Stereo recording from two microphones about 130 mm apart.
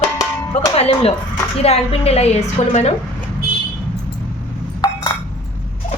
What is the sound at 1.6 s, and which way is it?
A woman's voice, 50° left (ahead or behind).